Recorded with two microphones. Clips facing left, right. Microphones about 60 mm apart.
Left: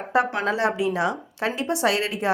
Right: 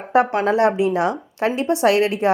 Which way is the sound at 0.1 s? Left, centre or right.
Right.